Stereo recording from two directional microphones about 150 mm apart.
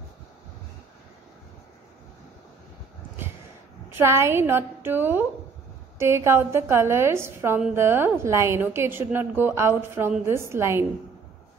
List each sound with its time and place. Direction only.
3.9 s a woman's voice: 20° right (ahead or behind)